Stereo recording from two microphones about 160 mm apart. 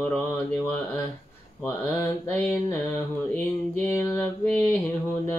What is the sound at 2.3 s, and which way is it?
Mantra, 15° left (ahead or behind).